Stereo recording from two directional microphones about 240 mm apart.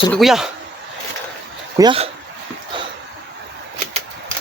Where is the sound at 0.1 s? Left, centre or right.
Centre.